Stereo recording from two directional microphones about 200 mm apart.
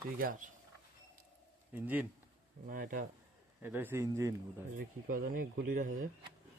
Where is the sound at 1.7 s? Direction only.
10° right (ahead or behind).